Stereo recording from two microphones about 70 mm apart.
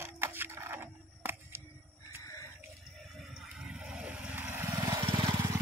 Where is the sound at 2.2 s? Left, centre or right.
Left.